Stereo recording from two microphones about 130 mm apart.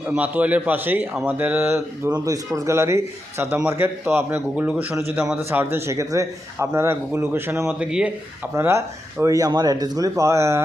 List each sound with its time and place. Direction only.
0.1 s a man's voice: 10° right (ahead or behind)
2.2 s a man's voice: 25° right (ahead or behind)
7.7 s a man's voice: 5° right (ahead or behind)
8.5 s speech: 20° right (ahead or behind)